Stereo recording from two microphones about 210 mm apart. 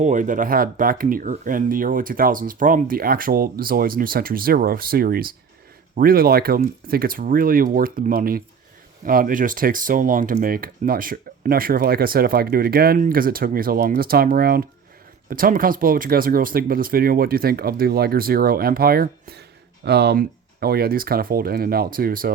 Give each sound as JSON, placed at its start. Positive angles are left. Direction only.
{"t": 0.0, "sound": "speech", "side_deg": -35}